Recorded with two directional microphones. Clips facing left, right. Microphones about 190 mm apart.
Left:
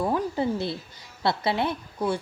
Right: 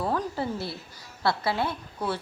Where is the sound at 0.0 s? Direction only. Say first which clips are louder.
Left 3 dB; 20° left (ahead or behind).